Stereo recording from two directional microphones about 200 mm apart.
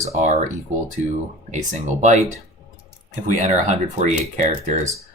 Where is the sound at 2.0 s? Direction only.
40° right (ahead or behind).